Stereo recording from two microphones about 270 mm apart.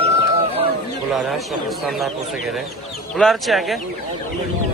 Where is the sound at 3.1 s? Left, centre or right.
Centre.